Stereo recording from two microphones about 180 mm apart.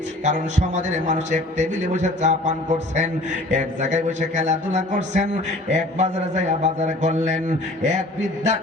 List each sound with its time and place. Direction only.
0.3 s a man's voice: 45° right (ahead or behind)